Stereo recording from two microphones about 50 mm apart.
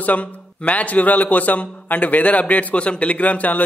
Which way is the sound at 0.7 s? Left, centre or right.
Left.